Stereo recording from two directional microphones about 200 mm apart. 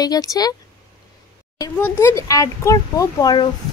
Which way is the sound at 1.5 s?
15° left (ahead or behind).